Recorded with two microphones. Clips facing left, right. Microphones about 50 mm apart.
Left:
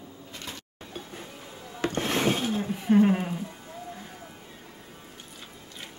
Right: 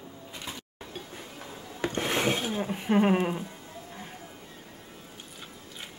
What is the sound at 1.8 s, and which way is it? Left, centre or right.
Wood, centre.